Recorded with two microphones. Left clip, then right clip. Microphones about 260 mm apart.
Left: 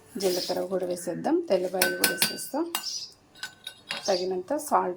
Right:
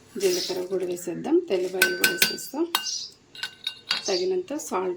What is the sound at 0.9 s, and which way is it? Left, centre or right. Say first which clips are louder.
Speech: right 2 dB; centre.